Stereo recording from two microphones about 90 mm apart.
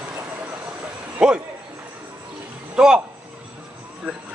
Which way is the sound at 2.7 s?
10° right (ahead or behind).